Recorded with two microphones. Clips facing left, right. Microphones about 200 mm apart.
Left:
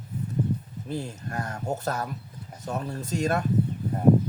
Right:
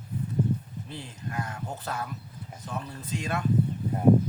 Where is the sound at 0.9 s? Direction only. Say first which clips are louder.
Left 6 dB; 45° left (ahead or behind).